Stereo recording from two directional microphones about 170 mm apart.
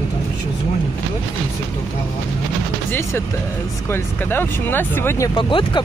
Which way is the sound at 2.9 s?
15° left (ahead or behind).